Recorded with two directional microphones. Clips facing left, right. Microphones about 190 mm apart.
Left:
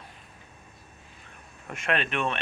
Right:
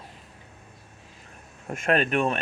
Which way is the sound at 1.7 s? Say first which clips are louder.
Right 5 dB; 45° right (ahead or behind).